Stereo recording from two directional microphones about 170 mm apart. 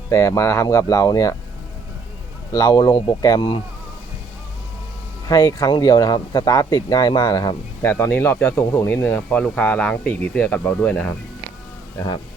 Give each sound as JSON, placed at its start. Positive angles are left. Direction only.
{"t": 0.1, "sound": "speech", "side_deg": 20}
{"t": 2.5, "sound": "speech", "side_deg": 25}
{"t": 5.3, "sound": "speech", "side_deg": 20}